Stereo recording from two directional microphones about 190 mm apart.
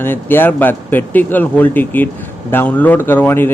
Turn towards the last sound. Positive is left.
turn(degrees=10)  # may be behind; listen again after turning